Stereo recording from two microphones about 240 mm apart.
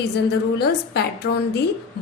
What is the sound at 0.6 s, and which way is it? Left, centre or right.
Speech, left.